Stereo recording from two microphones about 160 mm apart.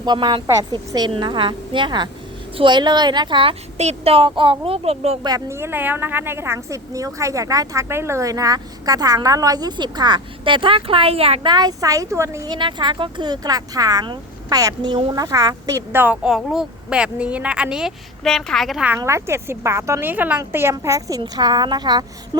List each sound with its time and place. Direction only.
0.0 s a woman's voice: 25° right (ahead or behind)
5.2 s a woman's voice: 20° right (ahead or behind); by 11.5 s 40° right (ahead or behind)
11.5 s a woman's voice: 25° right (ahead or behind)
12.5 s a woman's voice: 30° right (ahead or behind); by 18.9 s 5° right (ahead or behind)
18.9 s a woman's voice: 15° right (ahead or behind)